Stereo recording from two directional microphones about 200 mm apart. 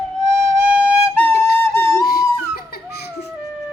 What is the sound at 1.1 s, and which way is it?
Flute, 10° left (ahead or behind).